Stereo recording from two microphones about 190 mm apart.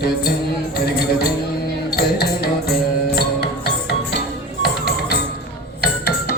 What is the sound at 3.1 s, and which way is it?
Music, 60° left (ahead or behind).